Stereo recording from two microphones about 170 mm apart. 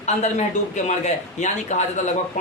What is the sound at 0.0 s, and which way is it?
A man's voice, 40° left (ahead or behind).